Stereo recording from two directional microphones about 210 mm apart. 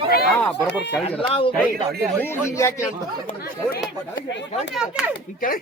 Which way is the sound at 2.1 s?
10° left (ahead or behind).